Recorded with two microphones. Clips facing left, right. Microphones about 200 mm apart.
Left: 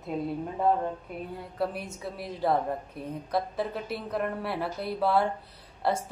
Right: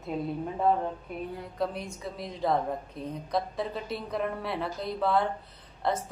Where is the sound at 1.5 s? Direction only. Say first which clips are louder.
Left 1 dB; 5° left (ahead or behind).